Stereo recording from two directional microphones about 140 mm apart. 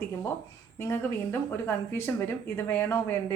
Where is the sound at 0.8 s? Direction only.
15° left (ahead or behind).